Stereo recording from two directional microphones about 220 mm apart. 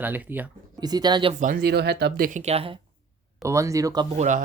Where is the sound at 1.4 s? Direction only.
40° right (ahead or behind); by 2.8 s 25° right (ahead or behind).